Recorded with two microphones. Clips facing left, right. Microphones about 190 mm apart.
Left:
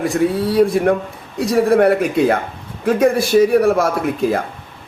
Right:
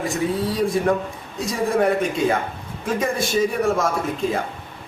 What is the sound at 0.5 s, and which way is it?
A man's voice, 60° left (ahead or behind).